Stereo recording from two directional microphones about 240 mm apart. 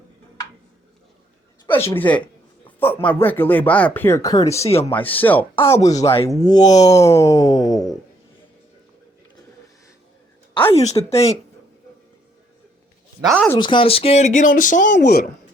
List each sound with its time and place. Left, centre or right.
1.7 s speech: centre
10.7 s speech: left
13.6 s speech: centre; by 15.3 s left